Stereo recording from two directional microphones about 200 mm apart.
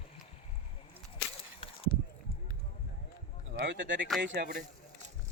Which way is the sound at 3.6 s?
65° right (ahead or behind).